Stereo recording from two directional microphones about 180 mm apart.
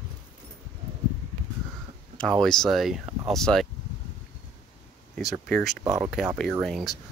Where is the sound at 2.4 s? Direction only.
5° left (ahead or behind).